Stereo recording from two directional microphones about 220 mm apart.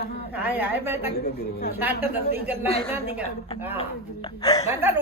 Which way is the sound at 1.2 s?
45° left (ahead or behind).